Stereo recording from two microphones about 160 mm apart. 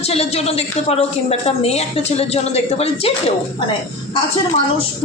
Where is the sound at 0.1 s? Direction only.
40° left (ahead or behind).